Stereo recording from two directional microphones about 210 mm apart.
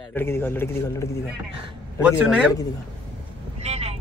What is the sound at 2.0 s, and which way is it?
Speech, 5° right (ahead or behind).